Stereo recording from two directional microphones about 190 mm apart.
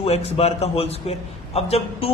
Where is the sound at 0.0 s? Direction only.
30° left (ahead or behind).